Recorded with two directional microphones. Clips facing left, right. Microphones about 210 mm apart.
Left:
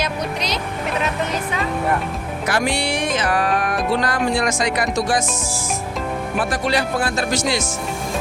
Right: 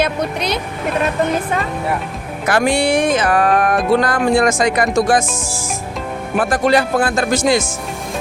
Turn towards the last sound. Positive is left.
turn(degrees=-50)  # may be behind; listen again after turning